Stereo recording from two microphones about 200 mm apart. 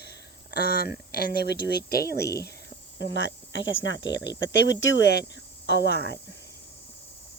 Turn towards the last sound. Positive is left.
turn(degrees=60)  # may be behind; listen again after turning